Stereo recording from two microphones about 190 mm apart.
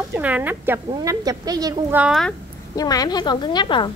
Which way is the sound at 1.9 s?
5° right (ahead or behind).